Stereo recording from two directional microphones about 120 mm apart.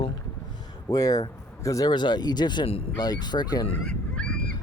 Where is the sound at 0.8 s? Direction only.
30° left (ahead or behind).